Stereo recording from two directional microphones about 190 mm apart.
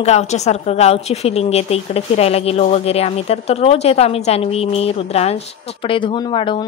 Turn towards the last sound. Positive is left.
turn(degrees=25)  # may be behind; listen again after turning